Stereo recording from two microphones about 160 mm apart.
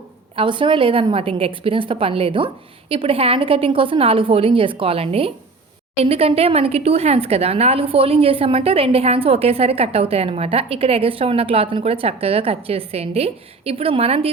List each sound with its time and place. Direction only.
0.3 s speech: 30° right (ahead or behind)